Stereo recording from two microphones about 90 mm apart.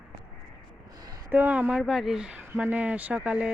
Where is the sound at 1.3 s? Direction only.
20° right (ahead or behind).